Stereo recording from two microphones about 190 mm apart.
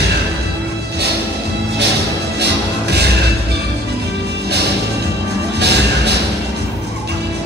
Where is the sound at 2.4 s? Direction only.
60° right (ahead or behind).